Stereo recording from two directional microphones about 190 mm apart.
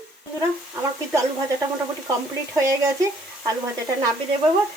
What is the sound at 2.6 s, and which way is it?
Speech, 15° right (ahead or behind).